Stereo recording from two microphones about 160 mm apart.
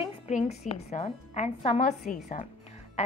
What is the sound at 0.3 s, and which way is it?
Music, 50° left (ahead or behind).